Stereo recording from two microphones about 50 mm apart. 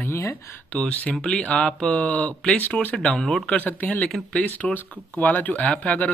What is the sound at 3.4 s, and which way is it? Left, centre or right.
Speech, left.